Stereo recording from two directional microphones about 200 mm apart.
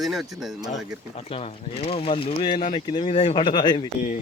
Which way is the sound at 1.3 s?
30° left (ahead or behind).